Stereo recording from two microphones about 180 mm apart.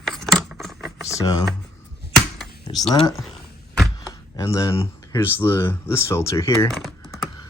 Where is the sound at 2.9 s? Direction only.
20° left (ahead or behind).